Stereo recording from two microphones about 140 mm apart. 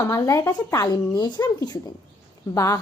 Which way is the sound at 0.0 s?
20° left (ahead or behind).